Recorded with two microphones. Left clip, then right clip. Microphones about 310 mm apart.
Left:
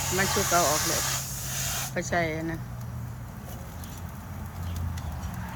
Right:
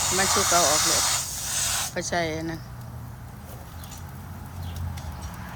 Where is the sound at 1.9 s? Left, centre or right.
Centre.